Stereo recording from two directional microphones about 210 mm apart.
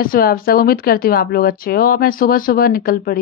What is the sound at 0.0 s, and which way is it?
Speech, 45° left (ahead or behind).